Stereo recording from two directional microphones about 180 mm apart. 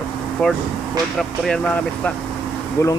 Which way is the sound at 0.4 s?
5° left (ahead or behind).